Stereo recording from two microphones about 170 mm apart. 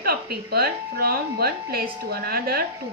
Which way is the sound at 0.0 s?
65° right (ahead or behind).